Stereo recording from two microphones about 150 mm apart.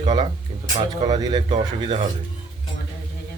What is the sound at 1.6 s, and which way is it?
Speech, 40° right (ahead or behind).